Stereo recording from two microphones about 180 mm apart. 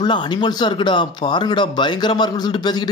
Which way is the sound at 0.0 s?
25° left (ahead or behind).